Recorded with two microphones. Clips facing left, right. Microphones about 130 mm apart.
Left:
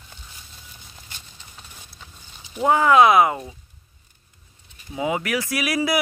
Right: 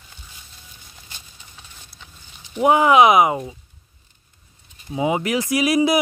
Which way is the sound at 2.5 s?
20° right (ahead or behind).